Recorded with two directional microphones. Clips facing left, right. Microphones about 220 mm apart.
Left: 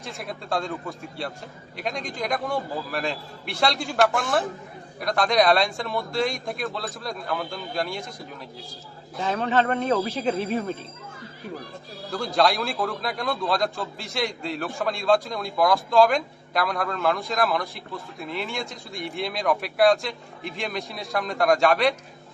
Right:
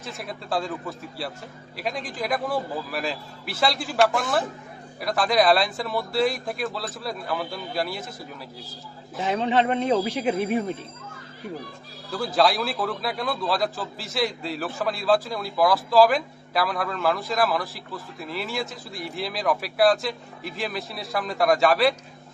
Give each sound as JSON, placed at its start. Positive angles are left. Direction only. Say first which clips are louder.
{"t": 0.0, "sound": "a man's voice", "louder": "even", "side_deg": 0}
{"t": 9.1, "sound": "speech", "louder": "right 1 dB", "side_deg": -15}
{"t": 12.1, "sound": "a man's voice", "louder": "right 1 dB", "side_deg": 0}